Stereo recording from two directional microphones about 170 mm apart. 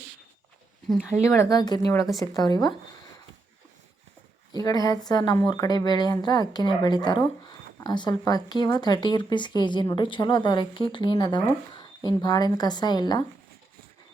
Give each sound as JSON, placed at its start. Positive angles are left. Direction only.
{"t": 0.9, "sound": "speech", "side_deg": -5}
{"t": 1.2, "sound": "speech", "side_deg": 20}
{"t": 4.6, "sound": "speech", "side_deg": 20}